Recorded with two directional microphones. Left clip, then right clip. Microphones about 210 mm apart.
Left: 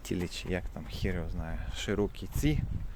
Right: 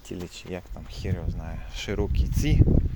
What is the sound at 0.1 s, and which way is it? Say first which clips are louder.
Speech: left 1 dB; 15° left (ahead or behind).